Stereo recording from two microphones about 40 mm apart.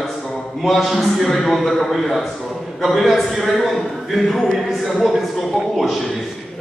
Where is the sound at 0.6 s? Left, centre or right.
Centre.